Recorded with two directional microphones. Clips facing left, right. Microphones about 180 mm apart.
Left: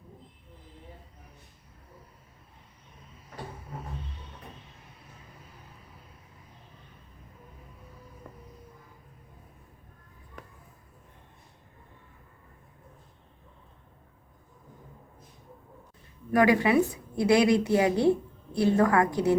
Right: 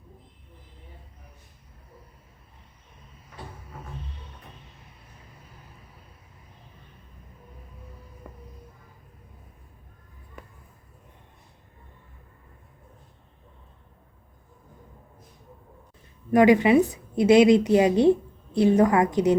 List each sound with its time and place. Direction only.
8.2 s vehicle: 10° right (ahead or behind)
16.3 s a woman's voice: 20° right (ahead or behind)